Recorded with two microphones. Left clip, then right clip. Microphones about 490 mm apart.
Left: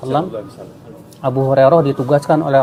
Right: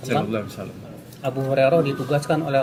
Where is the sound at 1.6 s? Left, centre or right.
Left.